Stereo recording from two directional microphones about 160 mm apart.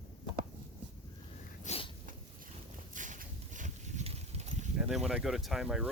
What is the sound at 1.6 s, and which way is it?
Sneeze, 40° left (ahead or behind).